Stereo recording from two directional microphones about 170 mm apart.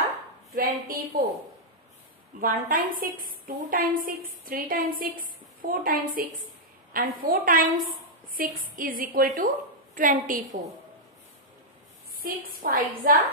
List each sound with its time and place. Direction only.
0.6 s a woman's voice: 55° right (ahead or behind)
2.4 s a woman's voice: 55° right (ahead or behind)
12.2 s a woman's voice: 55° right (ahead or behind)